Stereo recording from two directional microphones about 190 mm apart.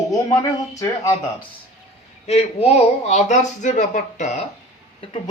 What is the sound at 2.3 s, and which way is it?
Speech, 35° left (ahead or behind).